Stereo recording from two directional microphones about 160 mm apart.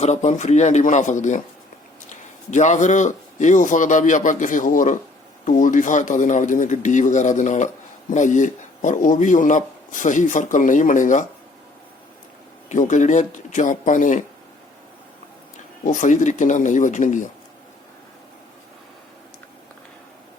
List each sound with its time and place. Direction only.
0.0 s speech: 45° left (ahead or behind)
2.5 s speech: 50° left (ahead or behind)
12.6 s speech: 50° left (ahead or behind)
15.8 s speech: 50° left (ahead or behind)